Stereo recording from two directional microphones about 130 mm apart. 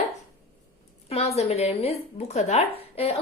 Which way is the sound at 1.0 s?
55° left (ahead or behind).